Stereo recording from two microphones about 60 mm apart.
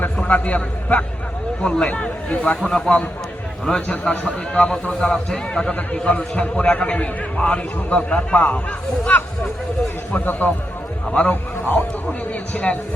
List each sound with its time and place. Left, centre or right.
0.3 s a man's voice: left
2.6 s a man's voice: centre
10.1 s a man's voice: left